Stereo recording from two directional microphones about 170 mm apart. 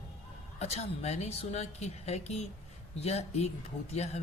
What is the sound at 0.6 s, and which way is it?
Speech, 40° left (ahead or behind).